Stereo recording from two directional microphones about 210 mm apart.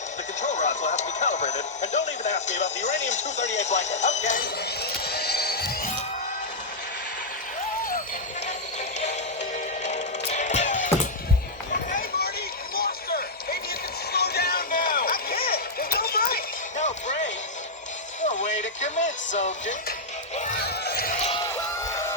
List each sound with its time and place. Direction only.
0.4 s speech: 35° left (ahead or behind)
4.8 s music: 50° left (ahead or behind)
9.8 s music: 35° left (ahead or behind)
11.9 s run: 45° left (ahead or behind)
12.7 s a sound: 45° left (ahead or behind)
14.1 s music: 50° left (ahead or behind)
21.2 s a sound: 30° left (ahead or behind)
21.4 s music: 15° left (ahead or behind)